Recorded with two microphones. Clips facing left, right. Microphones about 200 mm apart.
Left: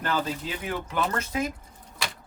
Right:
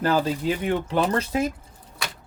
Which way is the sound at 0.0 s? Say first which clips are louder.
Right 7 dB; 35° right (ahead or behind).